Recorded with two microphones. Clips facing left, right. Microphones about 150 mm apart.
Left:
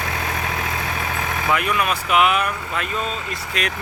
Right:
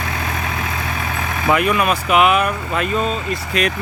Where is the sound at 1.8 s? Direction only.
55° right (ahead or behind).